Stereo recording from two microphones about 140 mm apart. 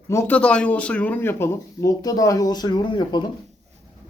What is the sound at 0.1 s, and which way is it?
Speech, 15° left (ahead or behind).